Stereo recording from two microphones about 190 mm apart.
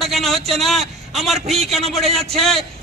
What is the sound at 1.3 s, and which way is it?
Speech, 35° right (ahead or behind).